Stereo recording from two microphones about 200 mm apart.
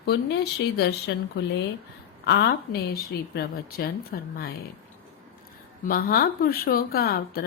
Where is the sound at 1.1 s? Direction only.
65° left (ahead or behind).